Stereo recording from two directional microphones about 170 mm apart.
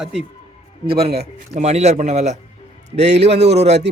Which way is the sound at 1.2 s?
40° right (ahead or behind).